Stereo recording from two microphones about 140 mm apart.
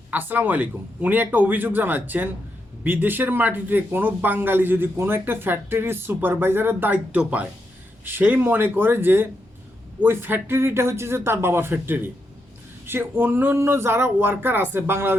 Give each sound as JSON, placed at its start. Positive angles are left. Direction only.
{"t": 0.1, "sound": "speech", "side_deg": -15}